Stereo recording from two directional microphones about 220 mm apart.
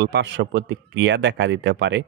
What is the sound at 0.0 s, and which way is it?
Speech, 50° right (ahead or behind).